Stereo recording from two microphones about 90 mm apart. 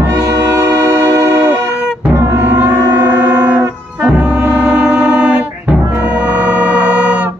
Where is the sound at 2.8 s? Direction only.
35° right (ahead or behind).